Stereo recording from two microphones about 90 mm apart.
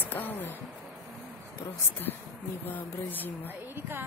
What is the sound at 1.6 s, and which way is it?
Speech, 25° left (ahead or behind).